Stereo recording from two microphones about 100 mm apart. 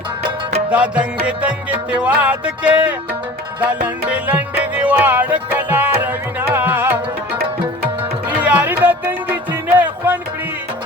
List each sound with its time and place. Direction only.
0.7 s music: 10° right (ahead or behind)
8.3 s music: 15° right (ahead or behind)